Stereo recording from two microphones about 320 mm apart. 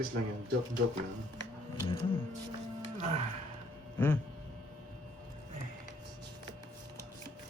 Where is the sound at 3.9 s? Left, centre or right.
Centre.